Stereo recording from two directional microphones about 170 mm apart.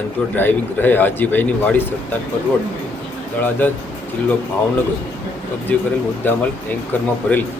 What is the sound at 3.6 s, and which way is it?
Speech, 10° left (ahead or behind).